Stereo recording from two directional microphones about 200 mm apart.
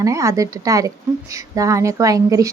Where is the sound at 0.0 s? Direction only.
15° right (ahead or behind).